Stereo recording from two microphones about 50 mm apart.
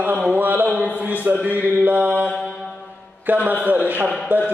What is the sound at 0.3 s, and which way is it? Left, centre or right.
Music, right.